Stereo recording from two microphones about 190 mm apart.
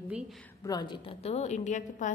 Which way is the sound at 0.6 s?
20° left (ahead or behind).